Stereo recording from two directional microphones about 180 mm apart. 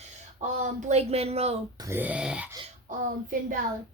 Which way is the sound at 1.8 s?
10° right (ahead or behind).